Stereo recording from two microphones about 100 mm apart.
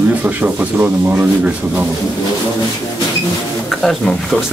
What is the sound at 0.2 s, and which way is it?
A man's voice, 15° right (ahead or behind).